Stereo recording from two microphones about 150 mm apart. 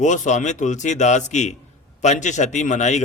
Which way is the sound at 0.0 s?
55° left (ahead or behind).